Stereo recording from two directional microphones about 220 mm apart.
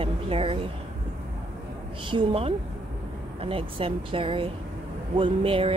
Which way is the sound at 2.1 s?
25° right (ahead or behind).